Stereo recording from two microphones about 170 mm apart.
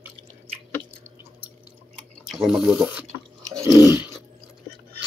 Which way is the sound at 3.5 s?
20° right (ahead or behind).